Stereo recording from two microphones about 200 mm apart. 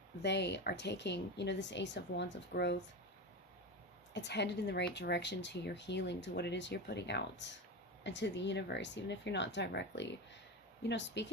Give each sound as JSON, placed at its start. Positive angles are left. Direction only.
{"t": 0.2, "sound": "speech", "side_deg": 60}
{"t": 4.1, "sound": "speech", "side_deg": 60}